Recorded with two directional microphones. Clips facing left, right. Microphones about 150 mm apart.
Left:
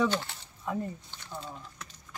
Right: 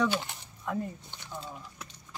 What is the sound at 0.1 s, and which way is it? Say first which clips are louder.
Speech: even; 15° right (ahead or behind).